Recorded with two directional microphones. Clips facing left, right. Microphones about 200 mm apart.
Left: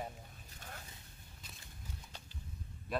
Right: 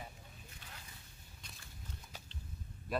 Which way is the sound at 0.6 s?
45° left (ahead or behind).